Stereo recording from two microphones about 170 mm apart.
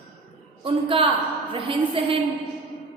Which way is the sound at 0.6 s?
30° right (ahead or behind).